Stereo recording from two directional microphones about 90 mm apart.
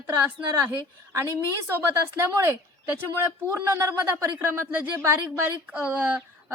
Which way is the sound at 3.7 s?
30° right (ahead or behind).